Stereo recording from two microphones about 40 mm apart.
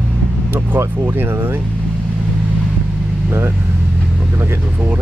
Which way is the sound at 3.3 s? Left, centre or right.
Right.